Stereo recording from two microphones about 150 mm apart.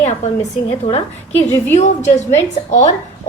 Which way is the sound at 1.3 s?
50° left (ahead or behind).